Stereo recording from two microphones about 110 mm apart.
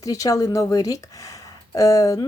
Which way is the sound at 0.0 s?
30° left (ahead or behind).